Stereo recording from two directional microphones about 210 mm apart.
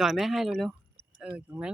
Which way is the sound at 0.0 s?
Centre (ahead or behind).